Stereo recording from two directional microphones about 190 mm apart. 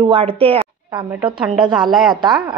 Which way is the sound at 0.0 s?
30° right (ahead or behind).